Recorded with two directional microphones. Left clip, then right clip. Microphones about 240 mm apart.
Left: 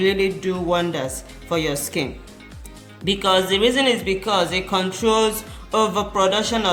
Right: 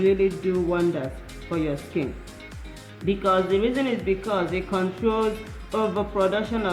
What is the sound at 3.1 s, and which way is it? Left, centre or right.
A man's voice, left.